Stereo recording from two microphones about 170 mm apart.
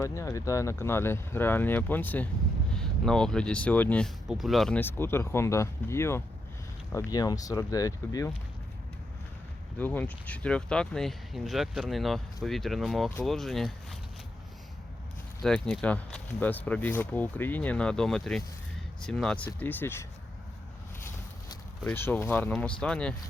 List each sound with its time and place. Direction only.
0.0 s speech: 15° left (ahead or behind)
9.7 s speech: 10° left (ahead or behind)
15.4 s speech: 5° left (ahead or behind)
21.8 s speech: 10° left (ahead or behind)